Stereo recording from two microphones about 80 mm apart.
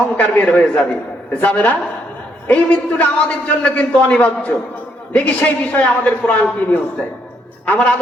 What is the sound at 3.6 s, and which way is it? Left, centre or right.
Speech, centre.